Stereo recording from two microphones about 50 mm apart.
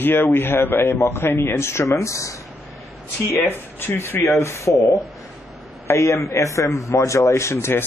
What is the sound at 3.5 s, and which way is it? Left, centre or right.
Speech, left.